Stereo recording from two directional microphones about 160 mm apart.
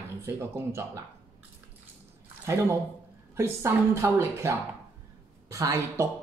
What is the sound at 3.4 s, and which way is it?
Speech, 15° right (ahead or behind).